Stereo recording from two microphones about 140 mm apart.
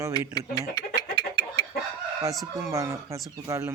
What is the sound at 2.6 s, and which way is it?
Speech, 20° right (ahead or behind).